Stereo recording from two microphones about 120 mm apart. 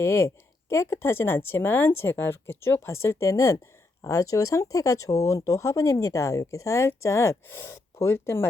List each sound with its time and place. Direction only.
0.0 s speech: 20° left (ahead or behind)